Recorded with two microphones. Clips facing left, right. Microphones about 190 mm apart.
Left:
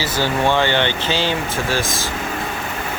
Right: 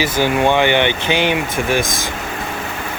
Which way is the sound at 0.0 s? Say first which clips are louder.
Right 4 dB; 15° right (ahead or behind).